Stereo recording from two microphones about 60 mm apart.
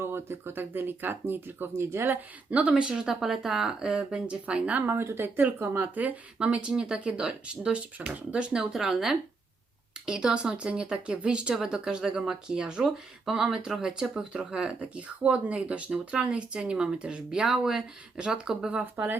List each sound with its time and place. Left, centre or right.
0.0 s speech: right
2.5 s speech: right
2.9 s speech: centre
4.9 s speech: right
5.7 s speech: right
8.7 s speech: centre
14.5 s speech: right